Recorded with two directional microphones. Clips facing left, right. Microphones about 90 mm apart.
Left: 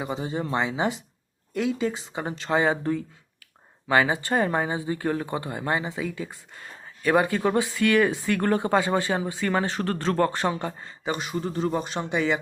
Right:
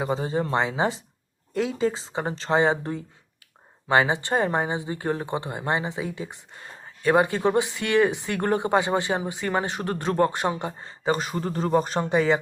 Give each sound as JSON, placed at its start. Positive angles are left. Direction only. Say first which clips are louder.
{"t": 0.0, "sound": "speech", "louder": "right 4 dB", "side_deg": -35}
{"t": 10.8, "sound": "speech", "louder": "right 5 dB", "side_deg": -35}